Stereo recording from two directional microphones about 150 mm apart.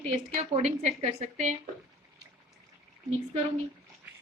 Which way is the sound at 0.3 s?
50° right (ahead or behind).